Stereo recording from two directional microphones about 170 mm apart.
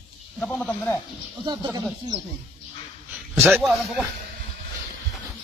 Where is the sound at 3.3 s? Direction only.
15° right (ahead or behind).